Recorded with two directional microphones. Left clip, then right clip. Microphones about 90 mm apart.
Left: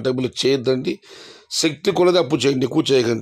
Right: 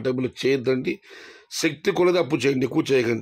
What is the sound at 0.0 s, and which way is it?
Speech, 35° left (ahead or behind).